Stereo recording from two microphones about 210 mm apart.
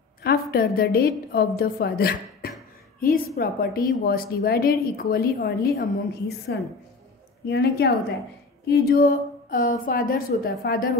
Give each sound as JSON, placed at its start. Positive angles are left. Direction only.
{"t": 0.2, "sound": "a woman's voice", "side_deg": 45}
{"t": 7.4, "sound": "speech", "side_deg": 50}